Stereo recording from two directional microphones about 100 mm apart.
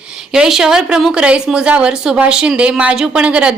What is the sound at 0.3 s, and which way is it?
Speech, 5° right (ahead or behind).